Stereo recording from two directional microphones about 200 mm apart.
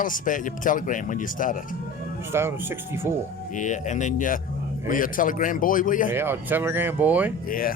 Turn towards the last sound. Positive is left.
turn(degrees=45)  # may be behind; listen again after turning